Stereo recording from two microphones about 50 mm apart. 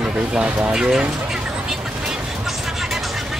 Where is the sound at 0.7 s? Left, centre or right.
Centre.